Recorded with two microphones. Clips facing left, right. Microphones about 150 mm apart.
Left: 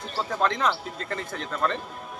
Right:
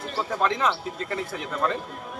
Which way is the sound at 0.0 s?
5° right (ahead or behind).